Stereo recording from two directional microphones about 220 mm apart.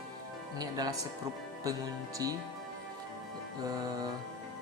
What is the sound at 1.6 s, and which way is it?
Speech, 15° right (ahead or behind).